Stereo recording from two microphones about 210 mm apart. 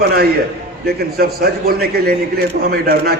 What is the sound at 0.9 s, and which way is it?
A man's voice, 45° right (ahead or behind).